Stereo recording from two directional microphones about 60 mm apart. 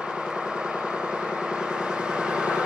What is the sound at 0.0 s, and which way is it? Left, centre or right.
Vehicle, centre.